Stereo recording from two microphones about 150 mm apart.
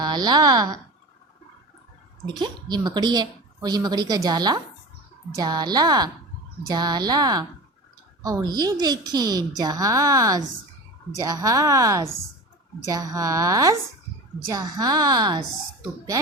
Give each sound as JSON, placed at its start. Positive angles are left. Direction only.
{"t": 0.0, "sound": "a woman's voice", "side_deg": -30}
{"t": 2.4, "sound": "a woman's voice", "side_deg": -30}